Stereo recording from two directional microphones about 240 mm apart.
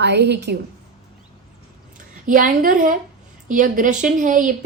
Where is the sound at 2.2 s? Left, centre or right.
Right.